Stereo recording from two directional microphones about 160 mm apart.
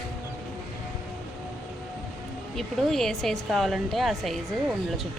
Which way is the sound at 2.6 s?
Centre (ahead or behind).